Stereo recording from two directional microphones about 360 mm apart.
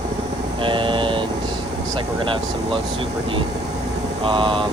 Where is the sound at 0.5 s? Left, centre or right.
Centre.